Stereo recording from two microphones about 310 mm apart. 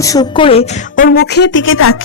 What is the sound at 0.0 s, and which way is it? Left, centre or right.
A woman's voice, centre.